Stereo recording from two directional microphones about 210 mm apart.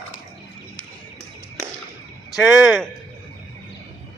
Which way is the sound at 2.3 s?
Centre (ahead or behind).